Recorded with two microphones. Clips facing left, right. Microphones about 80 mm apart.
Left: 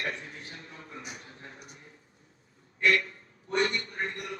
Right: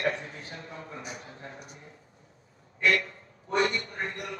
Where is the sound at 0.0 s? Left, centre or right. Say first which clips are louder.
Right 6 dB; right.